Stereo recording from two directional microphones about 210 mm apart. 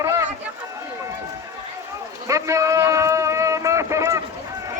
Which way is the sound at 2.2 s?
15° right (ahead or behind).